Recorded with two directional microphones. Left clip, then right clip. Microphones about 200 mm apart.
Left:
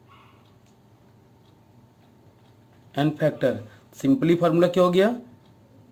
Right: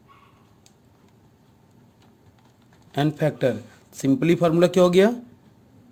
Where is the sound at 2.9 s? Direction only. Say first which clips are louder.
Even; 40° right (ahead or behind).